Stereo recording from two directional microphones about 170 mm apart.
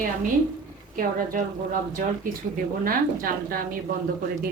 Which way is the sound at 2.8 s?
55° right (ahead or behind).